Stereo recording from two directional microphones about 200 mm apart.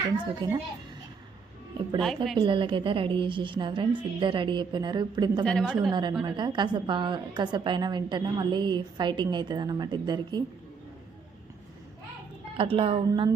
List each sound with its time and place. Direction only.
0.4 s a woman's voice: 25° right (ahead or behind)
2.0 s a woman's voice: centre (ahead or behind)
2.4 s a woman's voice: 25° right (ahead or behind)
5.5 s a woman's voice: centre (ahead or behind)
5.9 s a woman's voice: 20° right (ahead or behind)
12.5 s a woman's voice: 25° right (ahead or behind)